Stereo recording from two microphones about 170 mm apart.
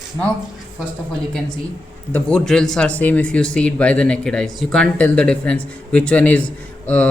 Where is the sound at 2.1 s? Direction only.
5° left (ahead or behind).